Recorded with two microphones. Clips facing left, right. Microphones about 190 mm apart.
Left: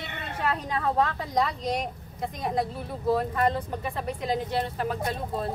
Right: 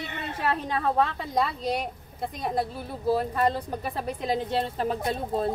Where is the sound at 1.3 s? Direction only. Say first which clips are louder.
Even; 5° right (ahead or behind).